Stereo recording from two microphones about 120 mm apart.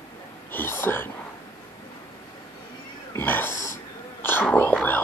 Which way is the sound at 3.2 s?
15° left (ahead or behind).